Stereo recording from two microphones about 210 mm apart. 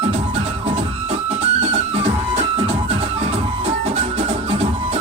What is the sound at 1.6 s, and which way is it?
Music, 30° right (ahead or behind).